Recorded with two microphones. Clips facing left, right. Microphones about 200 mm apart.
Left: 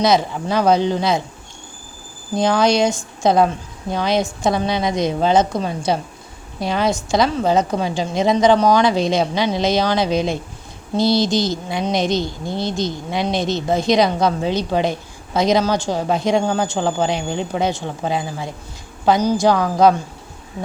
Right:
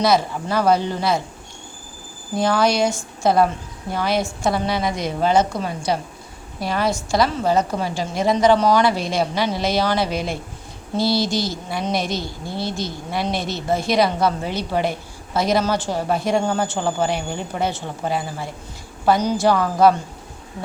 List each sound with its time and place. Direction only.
0.0 s a woman's voice: 20° left (ahead or behind)
2.3 s a woman's voice: 20° left (ahead or behind)